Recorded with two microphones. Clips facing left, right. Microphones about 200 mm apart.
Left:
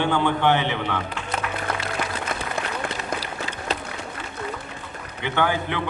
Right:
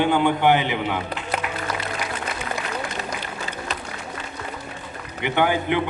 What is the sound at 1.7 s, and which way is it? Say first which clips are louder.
Music: left 1 dB; 55° left (ahead or behind).